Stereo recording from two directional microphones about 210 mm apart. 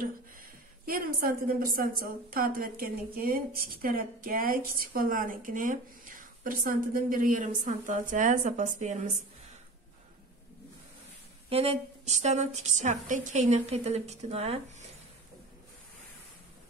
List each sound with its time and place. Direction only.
0.0 s a woman's voice: 45° right (ahead or behind)
11.4 s a woman's voice: 30° right (ahead or behind)